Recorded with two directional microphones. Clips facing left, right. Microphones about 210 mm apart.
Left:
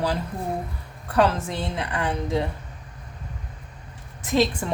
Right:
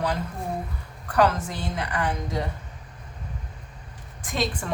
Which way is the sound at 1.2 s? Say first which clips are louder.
Left 1 dB; 25° left (ahead or behind).